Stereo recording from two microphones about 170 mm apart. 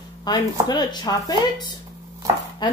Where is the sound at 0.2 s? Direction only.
25° left (ahead or behind).